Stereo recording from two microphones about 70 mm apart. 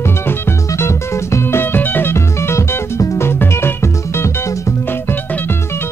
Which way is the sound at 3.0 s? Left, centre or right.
Left.